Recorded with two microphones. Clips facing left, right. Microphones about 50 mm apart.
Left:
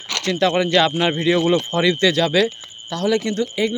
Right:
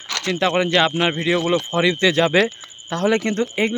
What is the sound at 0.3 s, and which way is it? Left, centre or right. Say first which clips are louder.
Speech: left 1 dB; centre.